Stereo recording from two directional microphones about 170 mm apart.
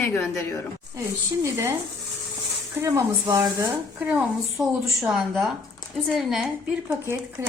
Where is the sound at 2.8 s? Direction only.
15° right (ahead or behind).